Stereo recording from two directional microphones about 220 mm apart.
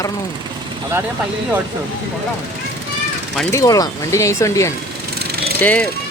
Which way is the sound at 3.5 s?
15° left (ahead or behind).